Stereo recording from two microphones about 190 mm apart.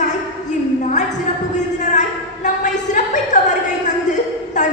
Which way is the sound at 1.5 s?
40° left (ahead or behind).